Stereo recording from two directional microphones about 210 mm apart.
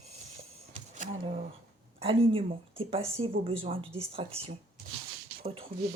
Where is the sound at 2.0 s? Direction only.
25° right (ahead or behind).